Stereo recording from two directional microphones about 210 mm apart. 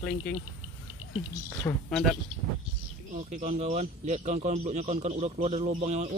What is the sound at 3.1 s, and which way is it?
Speech, 35° right (ahead or behind).